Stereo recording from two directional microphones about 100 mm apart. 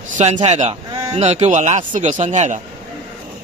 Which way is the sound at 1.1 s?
90° right.